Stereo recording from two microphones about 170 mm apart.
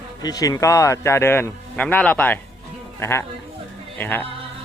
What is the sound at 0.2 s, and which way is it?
Speech, 20° left (ahead or behind).